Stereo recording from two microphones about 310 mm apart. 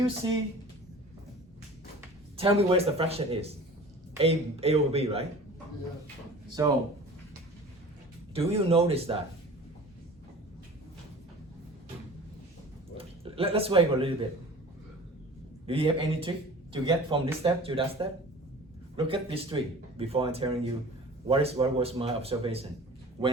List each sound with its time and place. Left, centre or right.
2.0 s speech: centre
6.6 s speech: centre
8.3 s speech: centre
13.0 s speech: centre
15.6 s a man's voice: centre